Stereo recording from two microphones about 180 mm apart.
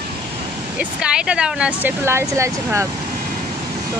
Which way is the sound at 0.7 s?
5° right (ahead or behind).